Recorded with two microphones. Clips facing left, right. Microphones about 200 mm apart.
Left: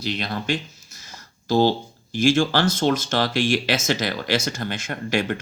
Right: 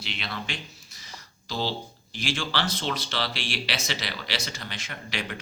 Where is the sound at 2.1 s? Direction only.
45° left (ahead or behind).